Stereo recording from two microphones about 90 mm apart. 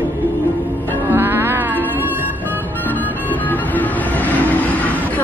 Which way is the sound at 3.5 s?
20° left (ahead or behind).